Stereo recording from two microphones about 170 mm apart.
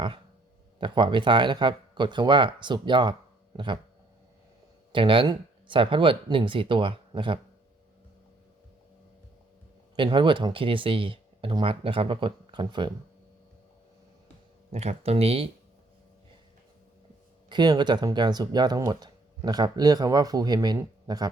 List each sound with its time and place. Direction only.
0.8 s speech: 30° right (ahead or behind)
4.9 s speech: 30° right (ahead or behind)
9.9 s speech: 30° right (ahead or behind)
14.7 s speech: 40° right (ahead or behind)
17.5 s speech: 25° right (ahead or behind)